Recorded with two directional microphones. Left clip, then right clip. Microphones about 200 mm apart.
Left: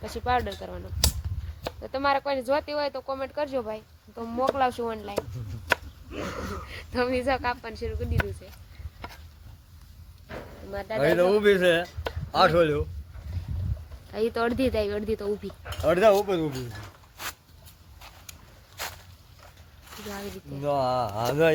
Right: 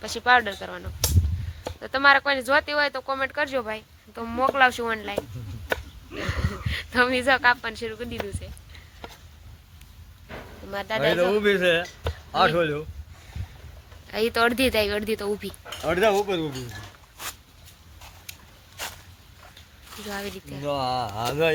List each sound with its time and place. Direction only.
0.0 s speech: centre (ahead or behind)
6.1 s a sound: 30° left (ahead or behind)
6.7 s speech: centre (ahead or behind)
10.2 s a sound: centre (ahead or behind)
11.0 s speech: 50° left (ahead or behind)
14.1 s speech: 5° left (ahead or behind)
15.8 s speech: 55° left (ahead or behind)
19.9 s speech: centre (ahead or behind)
20.6 s speech: 55° left (ahead or behind)